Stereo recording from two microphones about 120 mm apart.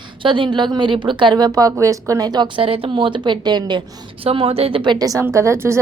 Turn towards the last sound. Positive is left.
turn(degrees=-20)  # may be behind; listen again after turning